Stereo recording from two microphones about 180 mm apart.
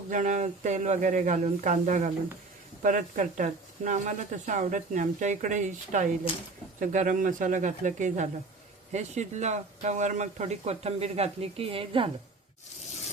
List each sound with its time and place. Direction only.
0.1 s speech: 45° right (ahead or behind)